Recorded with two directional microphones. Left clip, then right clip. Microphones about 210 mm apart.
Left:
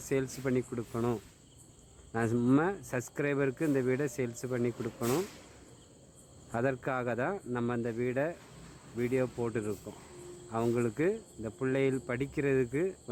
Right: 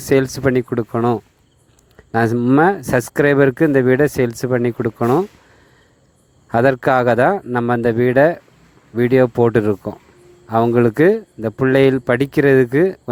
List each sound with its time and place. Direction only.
0.0 s speech: 45° right (ahead or behind)
6.5 s speech: 45° right (ahead or behind)